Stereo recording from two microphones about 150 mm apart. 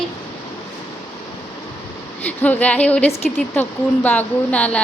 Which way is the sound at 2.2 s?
10° left (ahead or behind).